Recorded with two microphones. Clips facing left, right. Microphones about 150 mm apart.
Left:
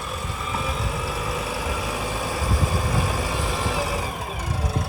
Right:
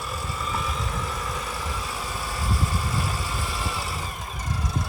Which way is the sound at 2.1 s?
90° left.